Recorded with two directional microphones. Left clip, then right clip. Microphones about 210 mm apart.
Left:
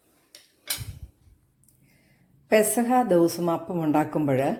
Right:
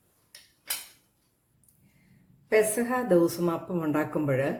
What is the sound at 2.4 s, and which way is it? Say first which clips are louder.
A woman's voice: left 3 dB; 30° left (ahead or behind).